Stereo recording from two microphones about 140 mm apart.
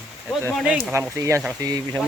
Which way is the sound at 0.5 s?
5° right (ahead or behind).